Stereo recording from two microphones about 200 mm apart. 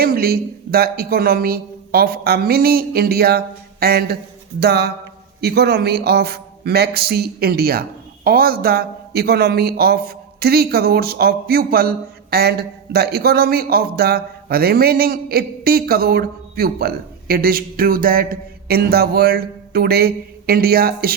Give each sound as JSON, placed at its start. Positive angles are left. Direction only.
{"t": 0.0, "sound": "a man's voice", "side_deg": -50}